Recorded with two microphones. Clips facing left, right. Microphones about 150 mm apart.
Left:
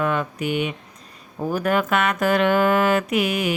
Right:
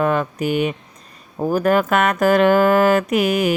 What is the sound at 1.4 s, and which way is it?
Speech, 40° right (ahead or behind).